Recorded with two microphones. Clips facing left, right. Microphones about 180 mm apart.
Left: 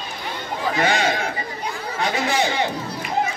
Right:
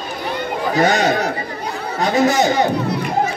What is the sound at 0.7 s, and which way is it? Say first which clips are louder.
Speech: right 6 dB; 40° right (ahead or behind).